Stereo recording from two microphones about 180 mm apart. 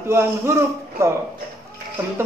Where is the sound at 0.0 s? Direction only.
15° right (ahead or behind).